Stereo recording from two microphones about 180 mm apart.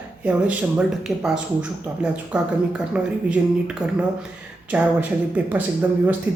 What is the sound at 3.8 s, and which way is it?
Speech, 20° right (ahead or behind).